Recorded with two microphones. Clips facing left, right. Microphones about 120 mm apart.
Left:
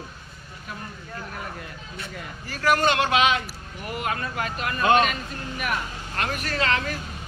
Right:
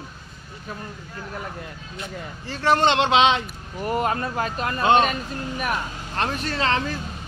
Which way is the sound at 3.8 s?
35° right (ahead or behind).